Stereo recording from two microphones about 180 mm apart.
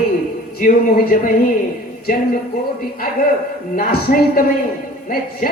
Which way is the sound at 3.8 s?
55° left (ahead or behind).